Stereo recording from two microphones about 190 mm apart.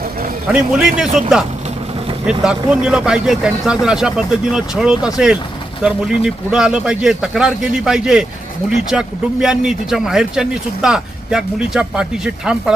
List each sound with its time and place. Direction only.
0.5 s speech: 5° right (ahead or behind)
2.2 s speech: 5° right (ahead or behind)